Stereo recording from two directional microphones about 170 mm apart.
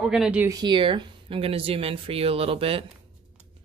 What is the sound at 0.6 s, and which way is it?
Speech, 30° right (ahead or behind).